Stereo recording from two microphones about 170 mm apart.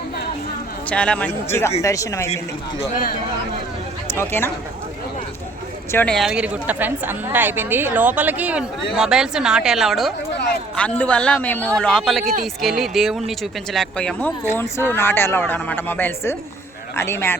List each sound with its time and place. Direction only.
0.9 s a man's voice: 5° left (ahead or behind)
4.1 s speech: 15° left (ahead or behind)
5.9 s speech: 10° left (ahead or behind)
6.1 s a woman's voice: 5° right (ahead or behind); by 17.3 s 15° left (ahead or behind)